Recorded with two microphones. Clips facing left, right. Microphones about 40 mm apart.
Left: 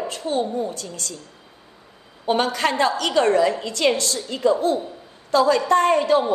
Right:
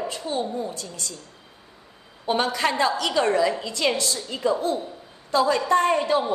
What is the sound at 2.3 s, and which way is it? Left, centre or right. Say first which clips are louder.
A woman's voice: left 2 dB; left.